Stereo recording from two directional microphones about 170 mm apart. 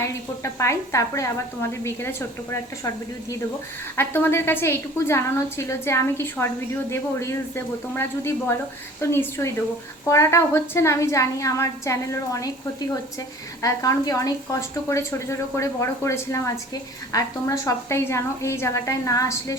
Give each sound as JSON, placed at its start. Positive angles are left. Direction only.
{"t": 0.0, "sound": "speech", "side_deg": 15}
{"t": 3.9, "sound": "speech", "side_deg": 15}
{"t": 13.6, "sound": "speech", "side_deg": 20}